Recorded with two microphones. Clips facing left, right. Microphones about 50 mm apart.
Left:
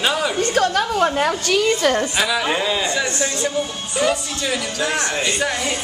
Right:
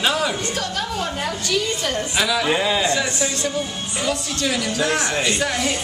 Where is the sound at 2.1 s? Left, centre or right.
Centre.